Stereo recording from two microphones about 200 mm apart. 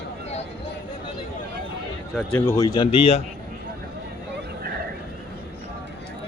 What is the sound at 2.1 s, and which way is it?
A man's voice, 10° left (ahead or behind).